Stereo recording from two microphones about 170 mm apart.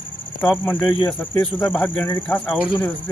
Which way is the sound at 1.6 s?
10° left (ahead or behind).